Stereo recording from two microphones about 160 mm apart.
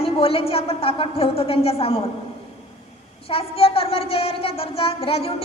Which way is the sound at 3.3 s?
35° left (ahead or behind).